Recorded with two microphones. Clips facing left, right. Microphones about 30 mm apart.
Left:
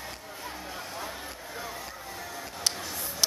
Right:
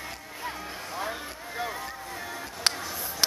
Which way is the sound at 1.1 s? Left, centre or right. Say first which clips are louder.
Right 4 dB; right.